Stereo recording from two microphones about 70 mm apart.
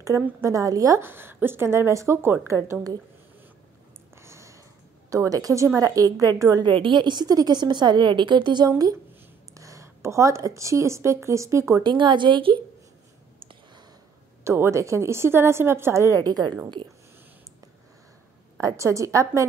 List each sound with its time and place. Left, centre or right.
0.0 s a woman's voice: right
1.0 s a woman's voice: right
4.2 s a sound: right
5.1 s a woman's voice: right
6.6 s a woman's voice: right
9.5 s speech: right
11.8 s a woman's voice: right
14.4 s a woman's voice: right
16.3 s a woman's voice: right
18.6 s a woman's voice: right